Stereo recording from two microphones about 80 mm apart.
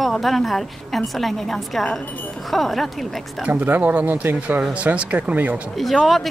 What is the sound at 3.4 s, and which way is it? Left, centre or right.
Speech, centre.